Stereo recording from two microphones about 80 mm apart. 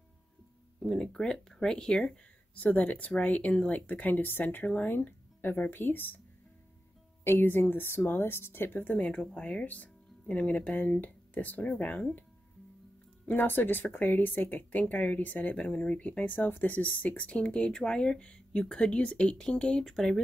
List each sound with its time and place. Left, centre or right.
0.8 s a woman's voice: centre; by 6.2 s left
7.2 s a woman's voice: left
13.3 s a woman's voice: left; by 20.2 s centre